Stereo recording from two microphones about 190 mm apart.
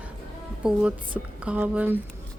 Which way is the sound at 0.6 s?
5° right (ahead or behind).